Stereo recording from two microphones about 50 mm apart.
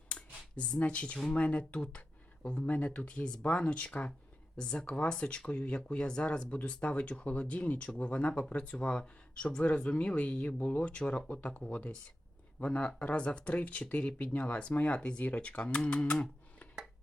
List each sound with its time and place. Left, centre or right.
0.5 s speech: left